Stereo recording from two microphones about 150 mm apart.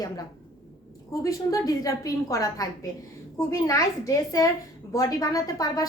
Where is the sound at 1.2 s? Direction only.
25° left (ahead or behind).